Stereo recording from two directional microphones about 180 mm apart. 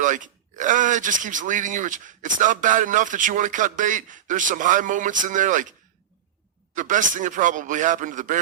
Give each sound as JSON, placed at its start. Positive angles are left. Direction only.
{"t": 0.0, "sound": "speech", "side_deg": -45}
{"t": 6.7, "sound": "speech", "side_deg": -45}